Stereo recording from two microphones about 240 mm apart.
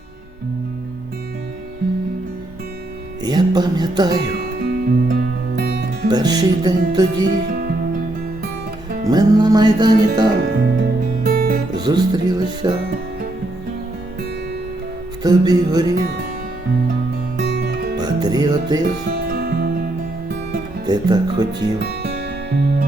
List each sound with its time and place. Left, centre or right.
3.2 s music: centre
4.2 s music: right
6.1 s music: centre
9.0 s music: centre
10.8 s music: right
11.8 s music: centre
15.2 s music: centre
17.4 s music: right
17.9 s music: centre
19.3 s music: right
20.8 s music: centre
21.6 s music: right